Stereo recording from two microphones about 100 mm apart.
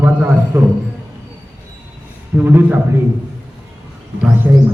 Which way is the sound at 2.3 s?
20° right (ahead or behind).